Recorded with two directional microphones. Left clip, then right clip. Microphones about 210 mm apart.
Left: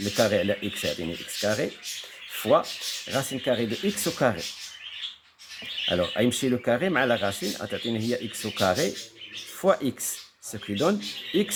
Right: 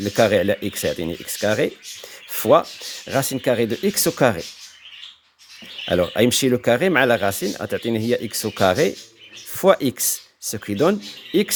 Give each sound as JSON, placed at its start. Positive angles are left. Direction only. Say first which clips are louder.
{"t": 0.2, "sound": "speech", "louder": "right 7 dB", "side_deg": -45}
{"t": 2.3, "sound": "rub", "louder": "right 6 dB", "side_deg": -45}
{"t": 3.1, "sound": "speech", "louder": "right 7 dB", "side_deg": -45}
{"t": 5.9, "sound": "speech", "louder": "right 8 dB", "side_deg": -45}